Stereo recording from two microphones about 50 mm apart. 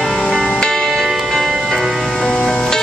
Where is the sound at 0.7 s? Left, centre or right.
Centre.